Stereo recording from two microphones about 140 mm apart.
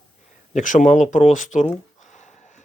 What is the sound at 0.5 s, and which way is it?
Speech, 65° left (ahead or behind).